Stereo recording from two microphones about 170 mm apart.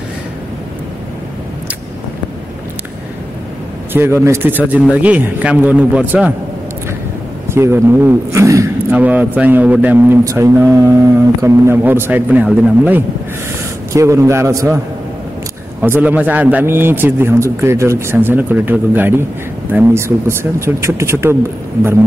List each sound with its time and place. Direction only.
3.9 s a man's voice: 15° right (ahead or behind)
7.4 s a man's voice: 15° right (ahead or behind)
13.9 s a man's voice: 20° right (ahead or behind)
15.8 s a man's voice: 10° right (ahead or behind)